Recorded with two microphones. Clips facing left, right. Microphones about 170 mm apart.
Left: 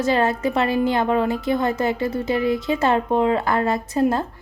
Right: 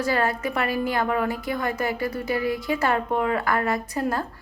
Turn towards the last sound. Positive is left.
turn(degrees=25)  # may be behind; listen again after turning